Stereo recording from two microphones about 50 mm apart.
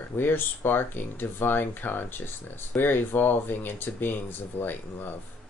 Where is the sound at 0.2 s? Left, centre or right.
Left.